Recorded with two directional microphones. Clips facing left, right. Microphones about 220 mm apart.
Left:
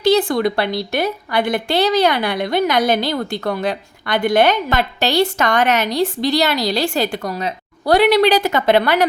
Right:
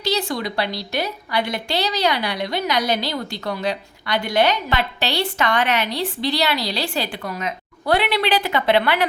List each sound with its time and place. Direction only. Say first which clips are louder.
0.0 s a woman's voice: left 9 dB; 55° left (ahead or behind)